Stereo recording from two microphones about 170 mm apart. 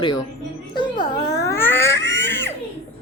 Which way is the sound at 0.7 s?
25° left (ahead or behind).